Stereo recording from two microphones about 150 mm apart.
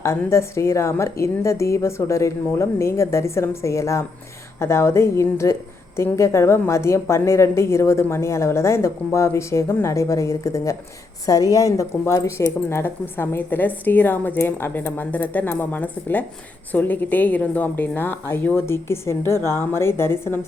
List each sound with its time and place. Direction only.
0.0 s a woman's voice: 20° left (ahead or behind)